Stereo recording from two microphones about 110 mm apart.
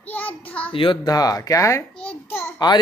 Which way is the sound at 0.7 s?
50° left (ahead or behind).